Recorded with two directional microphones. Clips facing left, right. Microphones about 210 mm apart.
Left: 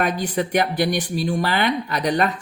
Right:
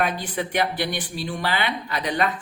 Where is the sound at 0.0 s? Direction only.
45° left (ahead or behind).